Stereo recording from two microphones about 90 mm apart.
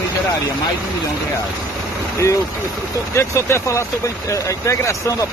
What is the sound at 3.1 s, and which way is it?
Speech, 30° left (ahead or behind).